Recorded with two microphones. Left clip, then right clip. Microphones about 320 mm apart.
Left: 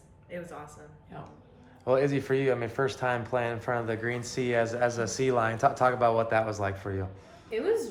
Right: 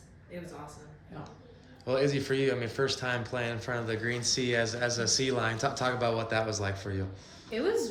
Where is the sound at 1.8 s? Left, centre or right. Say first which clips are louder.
Left 3 dB; centre.